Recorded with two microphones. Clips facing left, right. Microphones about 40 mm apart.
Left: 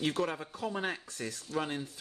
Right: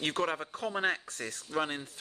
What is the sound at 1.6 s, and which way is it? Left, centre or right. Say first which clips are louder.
Speech: right 2 dB; right.